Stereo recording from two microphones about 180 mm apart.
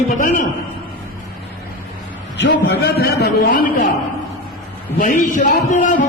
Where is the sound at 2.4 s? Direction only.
85° left; by 3.8 s 50° left (ahead or behind).